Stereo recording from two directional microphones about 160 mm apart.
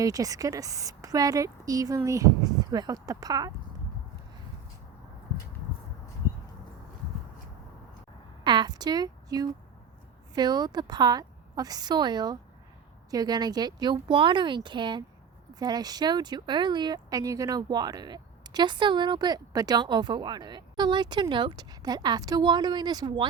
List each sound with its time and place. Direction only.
0.0 s speech: 20° right (ahead or behind)
8.4 s a woman's voice: 30° right (ahead or behind)